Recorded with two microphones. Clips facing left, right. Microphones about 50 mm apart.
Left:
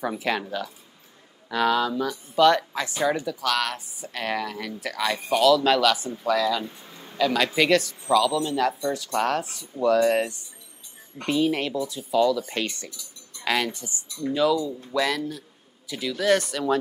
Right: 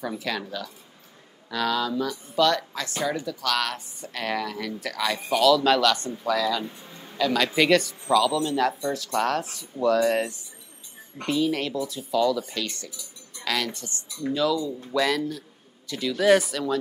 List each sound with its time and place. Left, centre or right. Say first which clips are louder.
0.0 s speech: left 3 dB; left
3.4 s speech: left 1 dB; centre
11.1 s speech: left 1 dB; centre
12.4 s speech: left 3 dB; left
13.4 s a sound: left 3 dB; centre
13.7 s speech: left 1 dB; centre
14.7 s speech: right 1 dB; centre
16.2 s speech: right 3 dB; centre